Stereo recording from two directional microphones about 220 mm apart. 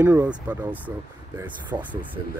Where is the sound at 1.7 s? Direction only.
20° right (ahead or behind).